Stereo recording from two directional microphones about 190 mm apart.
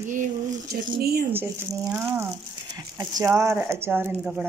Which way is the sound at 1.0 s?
55° right (ahead or behind).